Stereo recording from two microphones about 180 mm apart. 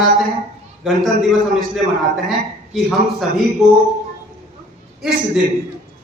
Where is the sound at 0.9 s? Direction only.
Centre (ahead or behind).